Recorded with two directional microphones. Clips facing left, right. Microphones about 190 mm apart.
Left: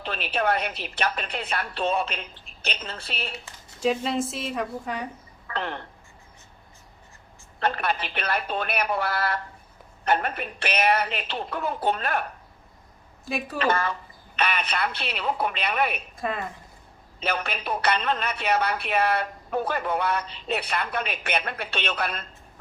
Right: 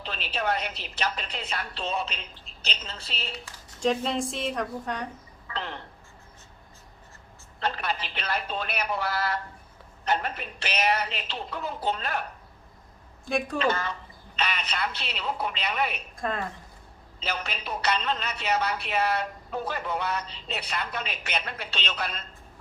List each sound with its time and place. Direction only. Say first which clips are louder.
0.0 s speech: left 4 dB; 55° left (ahead or behind)
3.8 s a woman's voice: left 1 dB; 5° left (ahead or behind)
5.5 s speech: left 4 dB; 60° left (ahead or behind)
7.6 s speech: left 4 dB; 55° left (ahead or behind)
13.2 s a woman's voice: right 3 dB; 5° left (ahead or behind)
13.6 s speech: left 2 dB; 55° left (ahead or behind)
16.1 s a woman's voice: left 1 dB; 5° left (ahead or behind)
17.2 s speech: left 5 dB; 55° left (ahead or behind)